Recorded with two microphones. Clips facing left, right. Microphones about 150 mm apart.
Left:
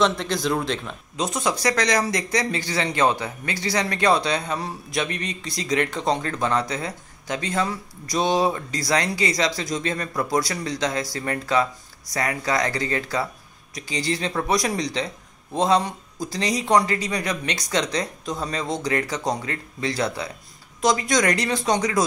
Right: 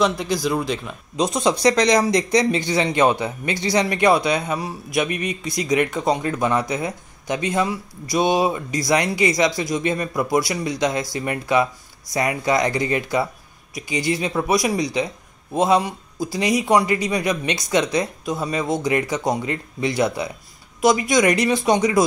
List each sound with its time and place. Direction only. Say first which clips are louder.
0.0 s speech: right 2 dB; 5° right (ahead or behind)
1.1 s a man's voice: right 5 dB; 15° right (ahead or behind)